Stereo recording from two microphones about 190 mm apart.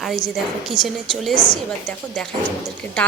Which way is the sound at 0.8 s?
20° left (ahead or behind).